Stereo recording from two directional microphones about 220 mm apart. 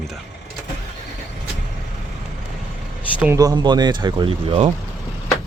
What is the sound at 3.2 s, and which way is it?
Speech, 15° right (ahead or behind).